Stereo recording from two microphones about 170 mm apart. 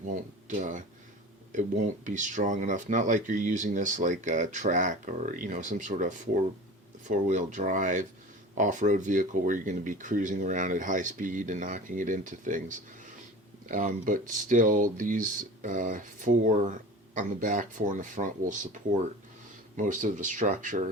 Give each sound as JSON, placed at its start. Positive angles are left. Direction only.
{"t": 0.4, "sound": "speech", "side_deg": -45}